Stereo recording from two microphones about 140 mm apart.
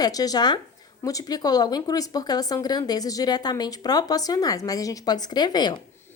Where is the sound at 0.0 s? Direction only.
25° left (ahead or behind).